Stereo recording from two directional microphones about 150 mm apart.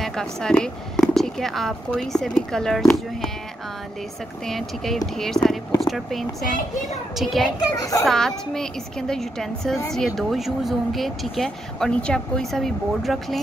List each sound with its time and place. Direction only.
0.0 s speech: 5° left (ahead or behind)
4.5 s speech: centre (ahead or behind)
7.7 s a child's voice: 20° left (ahead or behind)
8.0 s speech: centre (ahead or behind)